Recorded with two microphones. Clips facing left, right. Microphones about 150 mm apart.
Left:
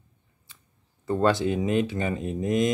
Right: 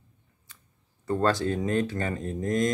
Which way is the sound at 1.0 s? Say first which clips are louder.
Left 2 dB; 20° left (ahead or behind).